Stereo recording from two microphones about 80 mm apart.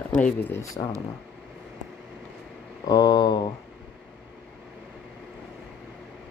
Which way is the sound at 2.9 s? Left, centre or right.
Left.